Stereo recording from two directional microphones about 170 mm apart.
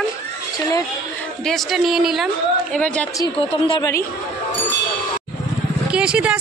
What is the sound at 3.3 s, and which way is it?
Speech, 30° left (ahead or behind).